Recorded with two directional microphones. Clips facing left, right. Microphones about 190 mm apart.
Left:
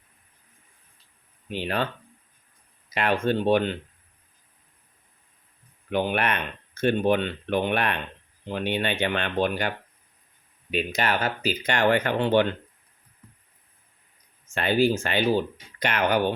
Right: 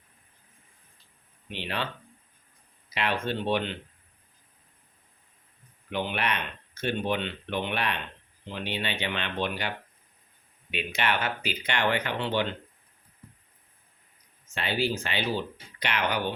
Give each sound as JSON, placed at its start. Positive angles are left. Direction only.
{"t": 1.5, "sound": "speech", "side_deg": 45}
{"t": 2.9, "sound": "speech", "side_deg": 45}
{"t": 5.9, "sound": "speech", "side_deg": 50}
{"t": 14.5, "sound": "speech", "side_deg": 50}